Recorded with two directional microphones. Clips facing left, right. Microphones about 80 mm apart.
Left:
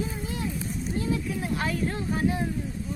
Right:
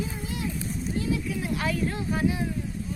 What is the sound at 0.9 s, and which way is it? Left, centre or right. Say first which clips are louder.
Speech: even; left.